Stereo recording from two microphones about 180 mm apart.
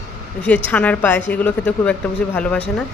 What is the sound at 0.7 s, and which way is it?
Speech, 10° left (ahead or behind).